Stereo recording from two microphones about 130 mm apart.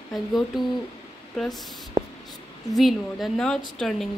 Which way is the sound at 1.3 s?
Centre (ahead or behind).